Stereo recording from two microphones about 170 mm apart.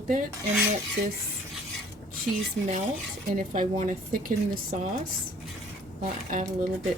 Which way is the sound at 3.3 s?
50° right (ahead or behind).